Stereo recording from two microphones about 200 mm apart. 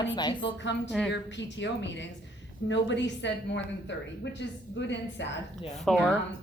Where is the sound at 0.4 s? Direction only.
65° left (ahead or behind).